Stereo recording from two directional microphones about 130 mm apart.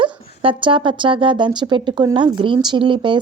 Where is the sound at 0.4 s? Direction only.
40° right (ahead or behind).